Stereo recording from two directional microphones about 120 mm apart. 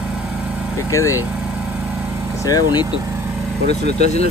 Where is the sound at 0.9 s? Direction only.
25° left (ahead or behind).